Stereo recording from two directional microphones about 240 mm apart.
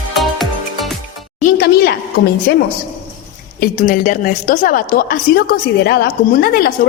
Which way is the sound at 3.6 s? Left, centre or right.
Left.